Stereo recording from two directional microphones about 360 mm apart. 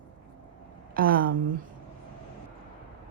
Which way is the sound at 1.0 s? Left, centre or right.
Right.